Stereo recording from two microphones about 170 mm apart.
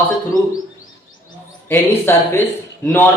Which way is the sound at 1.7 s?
15° left (ahead or behind).